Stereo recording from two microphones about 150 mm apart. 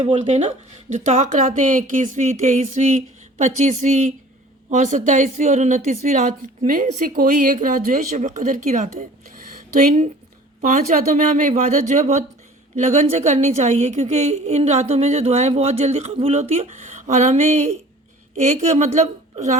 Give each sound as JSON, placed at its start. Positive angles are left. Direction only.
{"t": 0.0, "sound": "a woman's voice", "side_deg": -50}